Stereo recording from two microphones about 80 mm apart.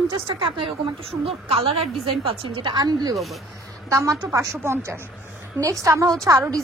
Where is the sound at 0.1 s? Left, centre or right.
Right.